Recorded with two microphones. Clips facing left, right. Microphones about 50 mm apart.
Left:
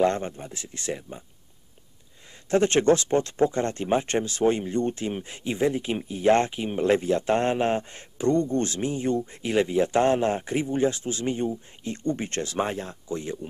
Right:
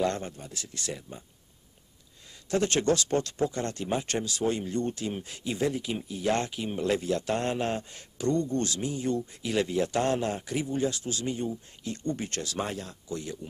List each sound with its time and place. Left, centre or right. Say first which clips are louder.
0.0 s speech: left 6 dB; left
2.5 s speech: left 6 dB; left